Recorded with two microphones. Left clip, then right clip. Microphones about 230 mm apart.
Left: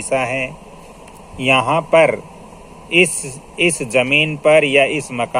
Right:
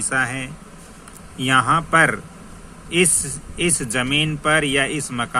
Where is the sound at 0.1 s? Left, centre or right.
Right.